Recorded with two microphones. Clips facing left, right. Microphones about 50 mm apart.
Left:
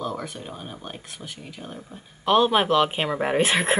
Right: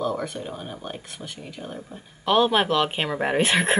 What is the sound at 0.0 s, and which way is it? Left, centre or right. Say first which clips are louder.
Speech: right 4 dB; centre.